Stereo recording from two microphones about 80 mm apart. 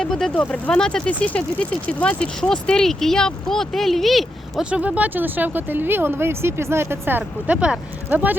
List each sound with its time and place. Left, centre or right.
0.0 s a sound: centre
0.3 s speech: centre
4.7 s speech: centre